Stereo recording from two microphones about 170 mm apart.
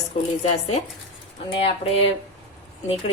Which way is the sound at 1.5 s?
35° left (ahead or behind).